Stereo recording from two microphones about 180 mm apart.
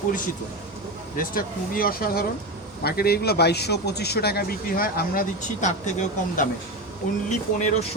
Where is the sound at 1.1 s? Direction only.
50° left (ahead or behind).